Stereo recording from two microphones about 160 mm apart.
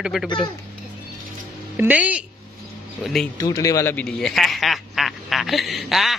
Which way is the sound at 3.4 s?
20° left (ahead or behind).